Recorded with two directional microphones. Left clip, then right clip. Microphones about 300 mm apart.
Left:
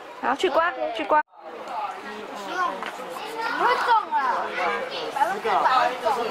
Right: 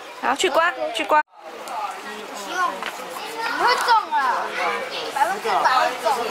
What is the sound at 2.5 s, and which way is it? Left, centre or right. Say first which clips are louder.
A child's voice: right 3 dB; centre.